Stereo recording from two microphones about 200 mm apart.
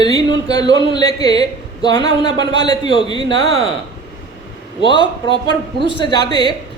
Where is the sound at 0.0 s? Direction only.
20° left (ahead or behind).